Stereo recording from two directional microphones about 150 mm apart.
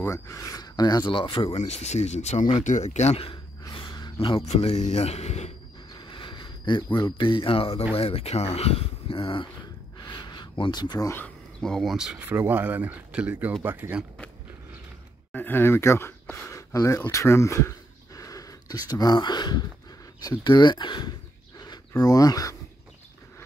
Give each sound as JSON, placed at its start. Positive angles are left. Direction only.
{"t": 0.0, "sound": "speech", "side_deg": 20}
{"t": 1.6, "sound": "speech", "side_deg": 50}
{"t": 3.7, "sound": "a sound", "side_deg": 30}
{"t": 4.5, "sound": "speech", "side_deg": 45}
{"t": 5.9, "sound": "a sound", "side_deg": 30}
{"t": 7.0, "sound": "speech", "side_deg": 30}
{"t": 12.2, "sound": "speech", "side_deg": -15}
{"t": 15.3, "sound": "speech", "side_deg": 15}
{"t": 21.5, "sound": "a sound", "side_deg": 25}